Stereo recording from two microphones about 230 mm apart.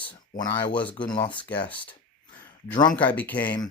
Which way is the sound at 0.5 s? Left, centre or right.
Centre.